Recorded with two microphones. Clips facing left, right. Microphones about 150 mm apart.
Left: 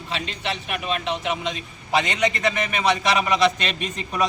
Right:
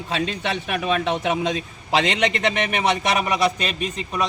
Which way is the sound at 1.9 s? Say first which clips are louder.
Right 1 dB; 90° right.